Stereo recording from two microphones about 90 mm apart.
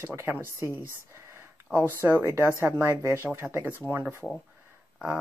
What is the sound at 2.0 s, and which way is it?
Speech, 25° right (ahead or behind).